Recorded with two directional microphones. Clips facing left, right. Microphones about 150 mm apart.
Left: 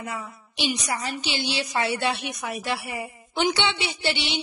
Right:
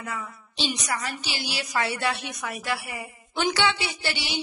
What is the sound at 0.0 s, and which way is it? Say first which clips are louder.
A woman's voice: left 1 dB; 25° left (ahead or behind).